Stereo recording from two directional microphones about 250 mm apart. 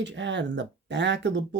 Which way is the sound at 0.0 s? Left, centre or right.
Right.